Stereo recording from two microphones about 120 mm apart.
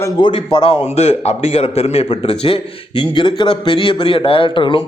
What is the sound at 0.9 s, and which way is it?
Speech, 65° left (ahead or behind).